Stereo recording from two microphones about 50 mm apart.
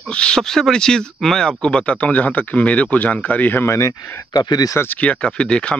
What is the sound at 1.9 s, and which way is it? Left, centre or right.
A man's voice, left.